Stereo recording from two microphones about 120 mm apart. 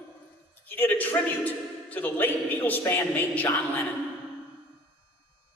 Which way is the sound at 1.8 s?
15° left (ahead or behind).